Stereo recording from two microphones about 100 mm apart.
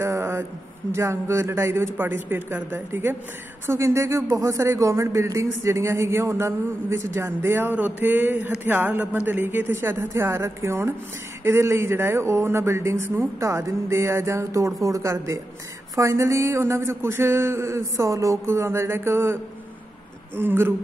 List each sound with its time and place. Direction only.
0.0 s a sound: 25° right (ahead or behind)
0.9 s speech: 30° right (ahead or behind)
20.3 s speech: 20° right (ahead or behind)